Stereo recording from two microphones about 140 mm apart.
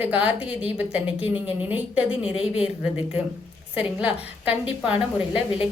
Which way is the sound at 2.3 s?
40° left (ahead or behind).